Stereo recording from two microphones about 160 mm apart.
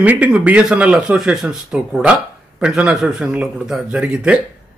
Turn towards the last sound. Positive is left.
turn(degrees=-5)  # may be behind; listen again after turning